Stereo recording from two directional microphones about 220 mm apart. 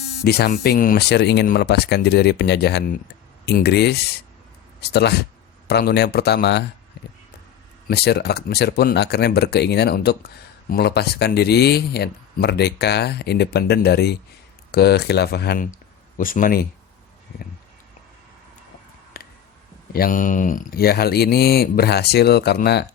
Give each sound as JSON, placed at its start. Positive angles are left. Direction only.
{"t": 0.3, "sound": "speech", "side_deg": 45}
{"t": 7.9, "sound": "speech", "side_deg": 45}
{"t": 19.1, "sound": "a sound", "side_deg": 45}
{"t": 19.9, "sound": "speech", "side_deg": 40}